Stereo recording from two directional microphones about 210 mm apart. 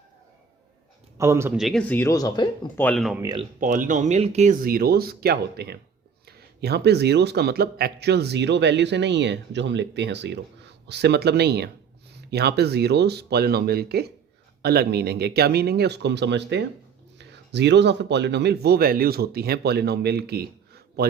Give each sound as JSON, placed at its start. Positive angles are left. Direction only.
{"t": 1.2, "sound": "a man's voice", "side_deg": -15}
{"t": 1.5, "sound": "speech", "side_deg": 0}
{"t": 2.8, "sound": "speech", "side_deg": 0}
{"t": 3.2, "sound": "speech", "side_deg": -20}
{"t": 3.6, "sound": "speech", "side_deg": -40}